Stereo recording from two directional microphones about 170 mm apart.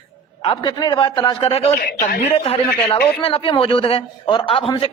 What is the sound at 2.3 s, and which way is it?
A man's voice, 35° left (ahead or behind).